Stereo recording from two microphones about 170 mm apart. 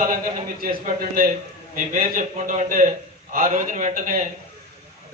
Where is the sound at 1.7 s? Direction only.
50° right (ahead or behind).